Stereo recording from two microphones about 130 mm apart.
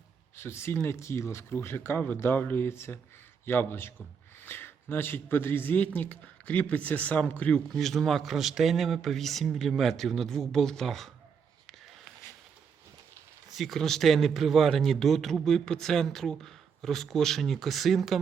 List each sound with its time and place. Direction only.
0.3 s speech: 20° left (ahead or behind)
7.8 s speech: centre (ahead or behind)
13.5 s speech: centre (ahead or behind)